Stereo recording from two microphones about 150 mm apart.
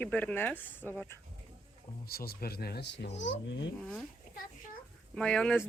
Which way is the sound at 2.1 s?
90° left.